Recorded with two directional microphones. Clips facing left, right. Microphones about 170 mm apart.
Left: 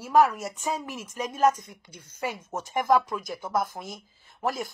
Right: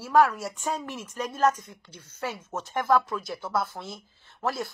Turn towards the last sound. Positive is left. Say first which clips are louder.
# even
turn(degrees=10)  # may be behind; listen again after turning